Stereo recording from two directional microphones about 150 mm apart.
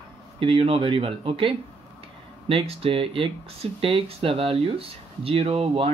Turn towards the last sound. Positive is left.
turn(degrees=-40)  # may be behind; listen again after turning